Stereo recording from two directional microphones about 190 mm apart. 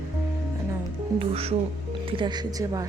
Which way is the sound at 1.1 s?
30° right (ahead or behind).